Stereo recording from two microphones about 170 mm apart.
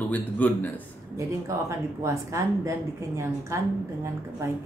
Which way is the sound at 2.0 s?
20° right (ahead or behind).